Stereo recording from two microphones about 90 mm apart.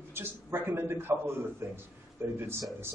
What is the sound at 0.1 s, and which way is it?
A man's voice, 25° right (ahead or behind).